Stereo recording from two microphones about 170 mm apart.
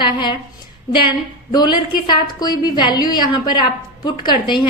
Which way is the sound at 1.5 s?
25° left (ahead or behind).